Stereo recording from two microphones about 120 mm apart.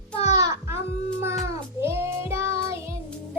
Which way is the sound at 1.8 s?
20° right (ahead or behind).